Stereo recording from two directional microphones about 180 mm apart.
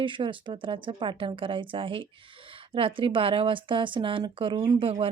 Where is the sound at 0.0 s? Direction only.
25° right (ahead or behind).